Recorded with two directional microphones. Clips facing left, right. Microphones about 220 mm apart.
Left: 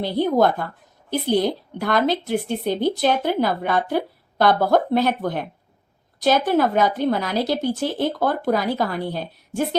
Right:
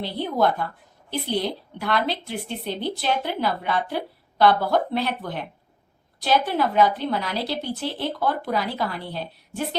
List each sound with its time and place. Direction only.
0.0 s speech: 45° left (ahead or behind)